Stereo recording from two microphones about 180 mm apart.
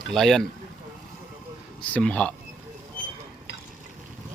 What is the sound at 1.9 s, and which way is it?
Speech, 5° left (ahead or behind).